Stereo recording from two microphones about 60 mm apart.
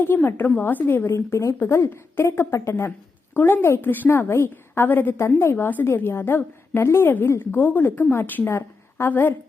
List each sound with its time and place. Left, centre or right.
0.0 s a woman's voice: left
0.9 s a woman's voice: left
4.1 s a woman's voice: left
8.4 s a sound: left
9.0 s a woman's voice: left